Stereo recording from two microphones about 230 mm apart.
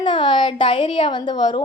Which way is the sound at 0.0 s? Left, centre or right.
Left.